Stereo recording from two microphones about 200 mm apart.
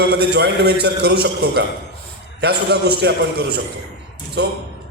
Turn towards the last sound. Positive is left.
turn(degrees=-55)  # may be behind; listen again after turning